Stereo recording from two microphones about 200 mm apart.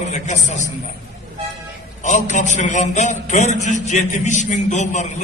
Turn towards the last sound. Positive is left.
turn(degrees=35)  # may be behind; listen again after turning